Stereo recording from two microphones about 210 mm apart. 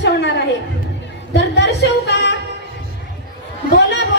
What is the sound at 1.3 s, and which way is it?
Speech, 55° left (ahead or behind).